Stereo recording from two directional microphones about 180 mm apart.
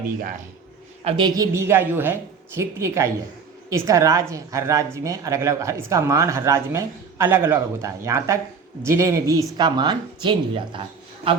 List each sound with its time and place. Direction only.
1.0 s speech: 25° right (ahead or behind)
1.5 s a woman's voice: 15° right (ahead or behind); by 10.8 s 30° right (ahead or behind)